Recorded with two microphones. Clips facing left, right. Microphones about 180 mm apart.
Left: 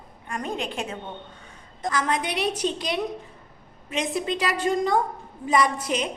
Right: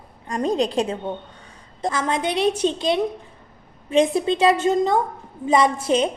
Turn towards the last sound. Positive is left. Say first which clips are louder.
# right 5 dB
turn(degrees=-30)  # may be behind; listen again after turning